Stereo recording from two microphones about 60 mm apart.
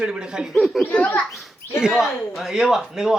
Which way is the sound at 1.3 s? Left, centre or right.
Centre.